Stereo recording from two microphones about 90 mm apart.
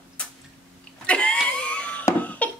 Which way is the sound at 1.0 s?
10° left (ahead or behind).